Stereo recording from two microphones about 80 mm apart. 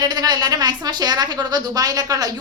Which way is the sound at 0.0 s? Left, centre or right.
Right.